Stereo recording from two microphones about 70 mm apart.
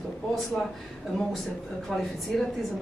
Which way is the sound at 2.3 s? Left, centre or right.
Centre.